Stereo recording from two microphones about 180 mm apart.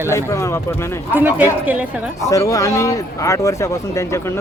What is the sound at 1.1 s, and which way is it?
Speech, 10° right (ahead or behind).